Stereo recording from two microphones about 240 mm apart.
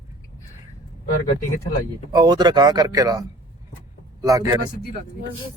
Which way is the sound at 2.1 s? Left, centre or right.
Centre.